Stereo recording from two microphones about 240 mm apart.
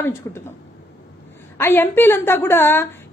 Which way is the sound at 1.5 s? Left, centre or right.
Centre.